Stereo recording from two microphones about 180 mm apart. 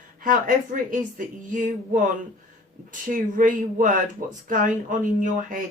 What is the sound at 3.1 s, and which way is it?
Speech, 45° right (ahead or behind).